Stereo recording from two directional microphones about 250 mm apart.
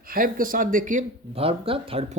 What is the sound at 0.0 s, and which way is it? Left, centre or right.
Speech, right.